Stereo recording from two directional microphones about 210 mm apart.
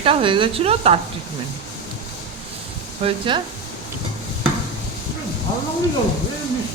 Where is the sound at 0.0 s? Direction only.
25° right (ahead or behind).